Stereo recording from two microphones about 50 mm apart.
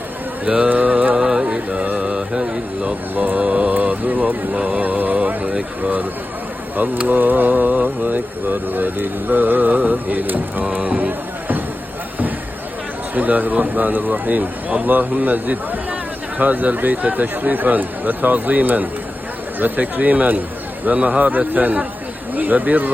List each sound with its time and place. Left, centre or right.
0.4 s mantra: right
1.1 s music: centre
1.5 s a sound: right
3.2 s mantra: right
3.4 s music: right
3.8 s a sound: right
4.5 s a sound: centre
4.8 s mantra: right
5.4 s a sound: right
6.7 s speech: right
10.8 s music: right
13.1 s speech: right